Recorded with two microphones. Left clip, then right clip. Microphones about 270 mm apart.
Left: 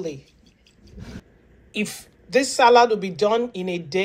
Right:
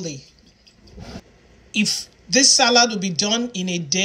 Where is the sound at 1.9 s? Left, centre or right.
Centre.